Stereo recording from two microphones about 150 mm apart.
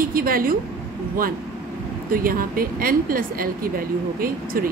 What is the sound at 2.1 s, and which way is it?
Speech, 70° right (ahead or behind).